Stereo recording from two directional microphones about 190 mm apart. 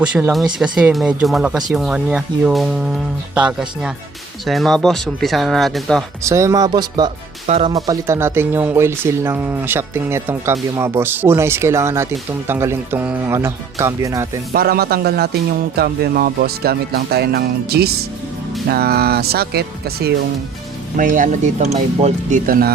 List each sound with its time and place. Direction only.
0.0 s speech: 10° right (ahead or behind)
6.2 s speech: 15° right (ahead or behind)
7.4 s speech: 35° right (ahead or behind)
7.7 s speech: 15° right (ahead or behind)
14.5 s speech: 55° right (ahead or behind)
20.9 s speech: 45° right (ahead or behind)